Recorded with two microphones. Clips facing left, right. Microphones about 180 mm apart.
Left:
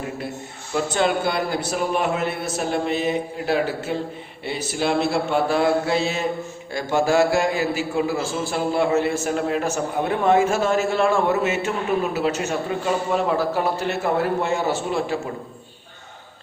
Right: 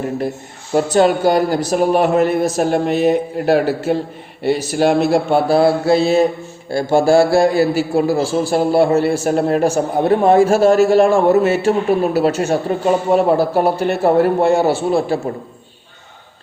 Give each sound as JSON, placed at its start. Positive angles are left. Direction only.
{"t": 0.7, "sound": "a man's voice", "side_deg": -40}